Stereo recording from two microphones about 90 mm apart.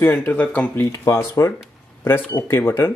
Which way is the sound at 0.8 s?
30° left (ahead or behind).